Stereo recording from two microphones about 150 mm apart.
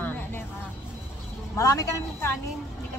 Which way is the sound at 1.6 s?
20° left (ahead or behind).